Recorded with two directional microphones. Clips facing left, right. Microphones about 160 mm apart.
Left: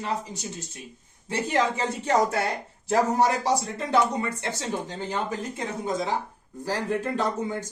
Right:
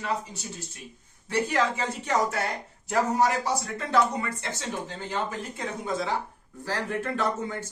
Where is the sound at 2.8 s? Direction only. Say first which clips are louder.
Left 2 dB; 25° left (ahead or behind).